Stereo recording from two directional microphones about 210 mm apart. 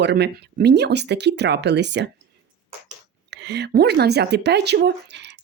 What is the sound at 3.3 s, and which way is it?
Speech, 55° right (ahead or behind).